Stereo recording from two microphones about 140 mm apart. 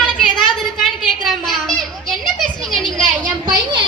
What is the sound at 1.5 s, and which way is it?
Children playing, centre (ahead or behind).